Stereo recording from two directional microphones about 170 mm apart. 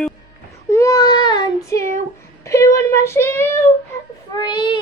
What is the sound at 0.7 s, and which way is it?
Child singing, 20° left (ahead or behind).